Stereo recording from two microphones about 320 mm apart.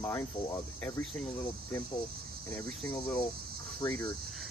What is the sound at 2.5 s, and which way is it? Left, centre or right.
Speech, centre.